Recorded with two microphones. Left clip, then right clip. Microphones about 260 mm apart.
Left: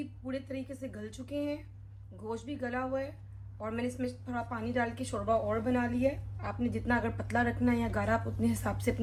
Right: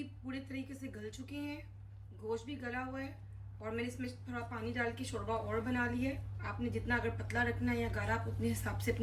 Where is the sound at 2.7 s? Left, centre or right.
Centre.